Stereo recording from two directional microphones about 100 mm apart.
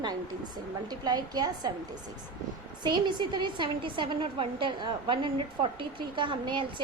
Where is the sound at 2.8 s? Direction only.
50° right (ahead or behind).